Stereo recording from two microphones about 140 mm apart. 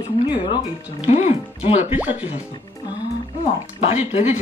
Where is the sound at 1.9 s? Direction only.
10° right (ahead or behind).